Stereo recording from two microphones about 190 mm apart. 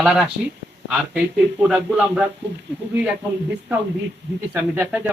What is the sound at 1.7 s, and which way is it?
Speech, 5° right (ahead or behind).